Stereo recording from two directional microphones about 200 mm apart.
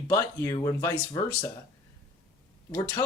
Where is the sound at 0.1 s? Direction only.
15° left (ahead or behind).